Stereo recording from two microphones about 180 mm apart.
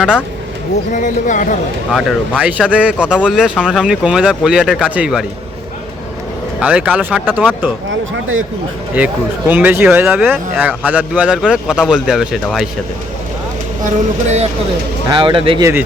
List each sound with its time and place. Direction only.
0.9 s speech: 45° left (ahead or behind)
1.9 s speech: centre (ahead or behind)
6.6 s speech: 5° right (ahead or behind)
8.1 s speech: 90° right
9.0 s speech: 10° right (ahead or behind)
13.8 s speech: 40° right (ahead or behind)
15.1 s a man's voice: 30° right (ahead or behind)